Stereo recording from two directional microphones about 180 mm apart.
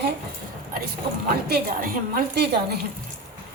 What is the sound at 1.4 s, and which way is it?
Speech, 55° right (ahead or behind).